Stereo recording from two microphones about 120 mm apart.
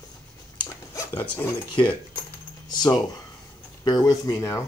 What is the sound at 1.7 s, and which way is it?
Speech, 40° left (ahead or behind).